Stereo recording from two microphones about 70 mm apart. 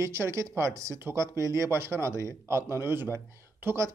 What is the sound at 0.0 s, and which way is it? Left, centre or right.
Speech, right.